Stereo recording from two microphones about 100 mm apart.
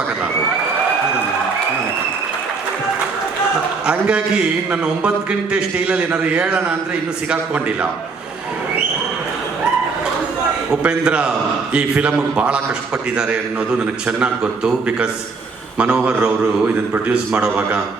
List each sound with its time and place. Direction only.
3.8 s a man's voice: 10° right (ahead or behind)
10.7 s a man's voice: 10° right (ahead or behind)